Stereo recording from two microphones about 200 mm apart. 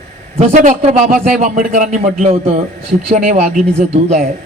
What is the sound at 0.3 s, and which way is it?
A man's voice, 35° right (ahead or behind).